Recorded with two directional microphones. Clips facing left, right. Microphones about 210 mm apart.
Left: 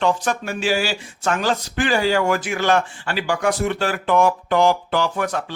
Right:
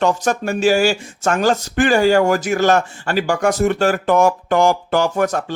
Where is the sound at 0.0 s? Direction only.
45° right (ahead or behind).